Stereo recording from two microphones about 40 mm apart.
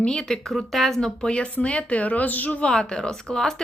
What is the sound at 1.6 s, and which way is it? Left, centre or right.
Speech, left.